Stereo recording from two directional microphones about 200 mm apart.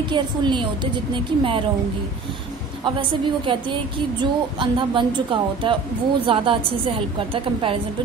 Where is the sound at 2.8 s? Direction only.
25° right (ahead or behind).